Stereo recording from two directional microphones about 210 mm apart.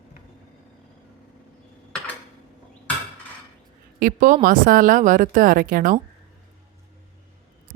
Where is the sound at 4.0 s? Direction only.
40° right (ahead or behind).